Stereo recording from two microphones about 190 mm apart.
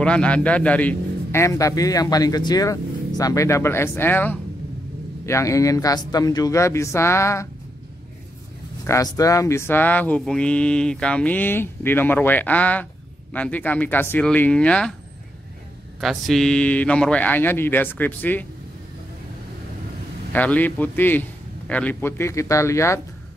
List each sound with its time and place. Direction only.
0.0 s a man's voice: 5° left (ahead or behind)
8.8 s a man's voice: 15° left (ahead or behind)
16.0 s a man's voice: centre (ahead or behind)
20.3 s a man's voice: 10° left (ahead or behind)